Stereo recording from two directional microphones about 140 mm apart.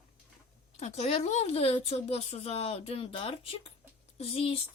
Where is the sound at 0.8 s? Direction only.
50° left (ahead or behind).